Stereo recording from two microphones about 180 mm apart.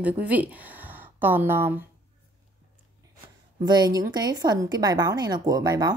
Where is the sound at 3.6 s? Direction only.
25° right (ahead or behind).